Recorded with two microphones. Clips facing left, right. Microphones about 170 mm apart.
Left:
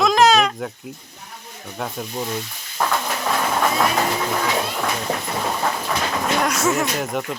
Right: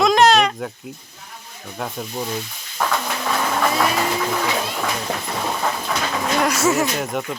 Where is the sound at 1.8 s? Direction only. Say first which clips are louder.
Even; centre (ahead or behind).